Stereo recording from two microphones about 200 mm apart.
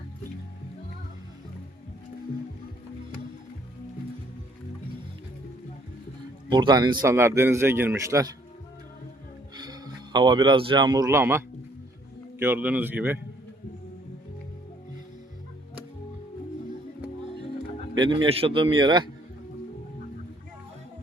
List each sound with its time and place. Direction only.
6.5 s a man's voice: 20° right (ahead or behind)
9.6 s a man's voice: 20° right (ahead or behind)
17.9 s a man's voice: 20° right (ahead or behind)